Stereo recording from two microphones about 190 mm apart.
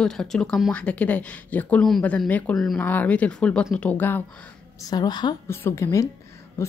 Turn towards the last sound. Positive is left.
turn(degrees=15)  # may be behind; listen again after turning